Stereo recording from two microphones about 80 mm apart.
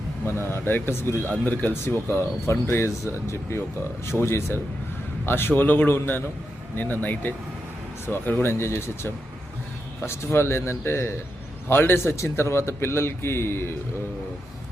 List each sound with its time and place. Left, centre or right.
0.3 s a man's voice: left